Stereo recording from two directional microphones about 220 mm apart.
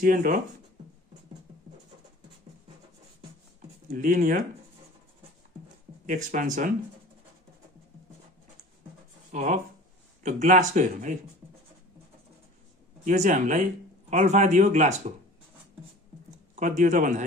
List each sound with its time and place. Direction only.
0.0 s speech: 40° right (ahead or behind)
3.9 s speech: 35° right (ahead or behind)
6.0 s speech: 35° right (ahead or behind)
9.3 s speech: 30° right (ahead or behind)
13.0 s speech: 35° right (ahead or behind)
16.5 s speech: 35° right (ahead or behind)